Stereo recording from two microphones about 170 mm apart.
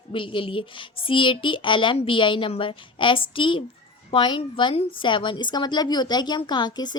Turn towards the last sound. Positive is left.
turn(degrees=25)  # may be behind; listen again after turning